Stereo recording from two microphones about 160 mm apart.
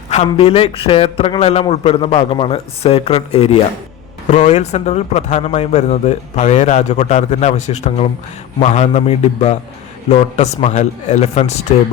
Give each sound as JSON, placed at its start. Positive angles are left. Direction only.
{"t": 0.1, "sound": "a man's voice", "side_deg": 40}